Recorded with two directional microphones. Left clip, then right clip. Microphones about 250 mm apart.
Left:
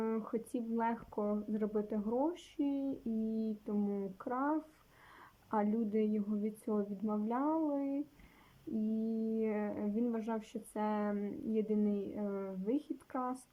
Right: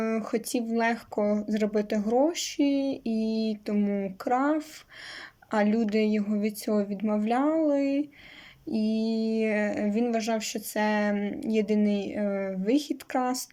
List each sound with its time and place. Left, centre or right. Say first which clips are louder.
0.0 s speech: right 9 dB; centre
9.3 s speech: right 11 dB; centre